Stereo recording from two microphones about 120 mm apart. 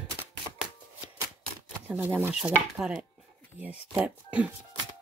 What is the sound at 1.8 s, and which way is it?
Speech, 15° right (ahead or behind).